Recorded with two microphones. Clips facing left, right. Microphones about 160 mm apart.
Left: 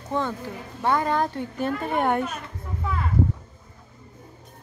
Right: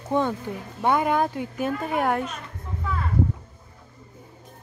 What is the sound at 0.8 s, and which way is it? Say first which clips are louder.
Speech: right 1 dB; 15° right (ahead or behind).